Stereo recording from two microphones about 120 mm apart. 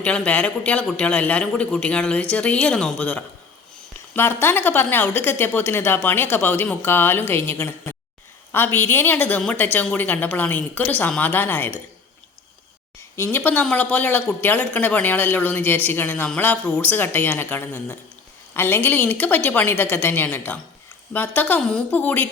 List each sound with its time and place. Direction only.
0.0 s speech: 10° left (ahead or behind)
13.1 s speech: 15° left (ahead or behind)